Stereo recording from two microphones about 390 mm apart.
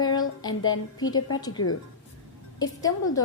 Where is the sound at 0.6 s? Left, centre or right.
Left.